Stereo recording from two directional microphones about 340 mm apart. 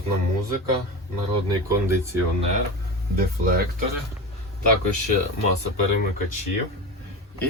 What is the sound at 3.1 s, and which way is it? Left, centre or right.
Speech, right.